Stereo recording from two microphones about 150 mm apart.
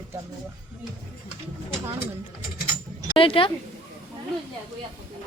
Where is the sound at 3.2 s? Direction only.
35° left (ahead or behind).